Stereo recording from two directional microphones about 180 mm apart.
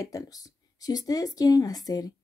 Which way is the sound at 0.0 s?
20° left (ahead or behind).